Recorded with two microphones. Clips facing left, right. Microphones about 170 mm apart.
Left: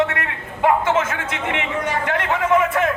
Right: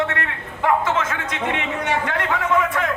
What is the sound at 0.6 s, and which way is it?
Speech, 10° left (ahead or behind).